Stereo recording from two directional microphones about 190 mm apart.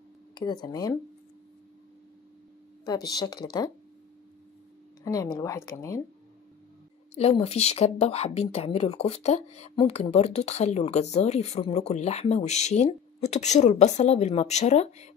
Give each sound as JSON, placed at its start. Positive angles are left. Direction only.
{"t": 0.3, "sound": "speech", "side_deg": 20}
{"t": 2.8, "sound": "speech", "side_deg": 20}
{"t": 5.0, "sound": "speech", "side_deg": 20}
{"t": 7.2, "sound": "a woman's voice", "side_deg": 30}